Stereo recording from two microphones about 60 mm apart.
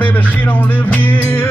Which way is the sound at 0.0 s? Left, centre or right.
Left.